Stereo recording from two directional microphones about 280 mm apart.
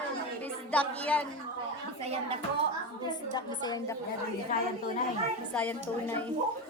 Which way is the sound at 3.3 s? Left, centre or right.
Centre.